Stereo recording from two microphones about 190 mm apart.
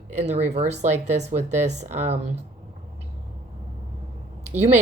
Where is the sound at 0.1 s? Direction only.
35° right (ahead or behind).